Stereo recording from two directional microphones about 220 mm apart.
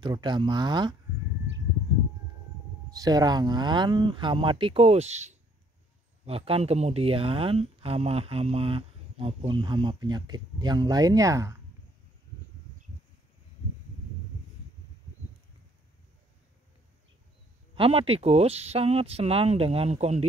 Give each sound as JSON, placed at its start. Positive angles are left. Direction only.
{"t": 0.0, "sound": "speech", "side_deg": -20}
{"t": 2.9, "sound": "speech", "side_deg": -15}
{"t": 17.7, "sound": "speech", "side_deg": -25}